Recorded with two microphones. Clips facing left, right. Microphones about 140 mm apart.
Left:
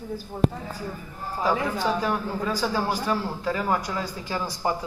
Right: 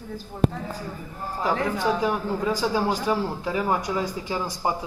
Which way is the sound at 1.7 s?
15° right (ahead or behind).